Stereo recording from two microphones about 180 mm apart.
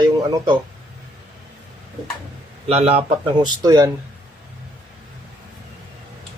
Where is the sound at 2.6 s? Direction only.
35° right (ahead or behind).